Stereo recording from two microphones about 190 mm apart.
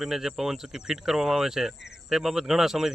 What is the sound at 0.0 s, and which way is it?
Speech, 5° right (ahead or behind).